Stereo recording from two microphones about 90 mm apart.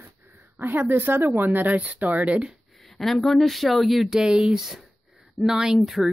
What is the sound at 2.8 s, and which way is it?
Speech, centre (ahead or behind).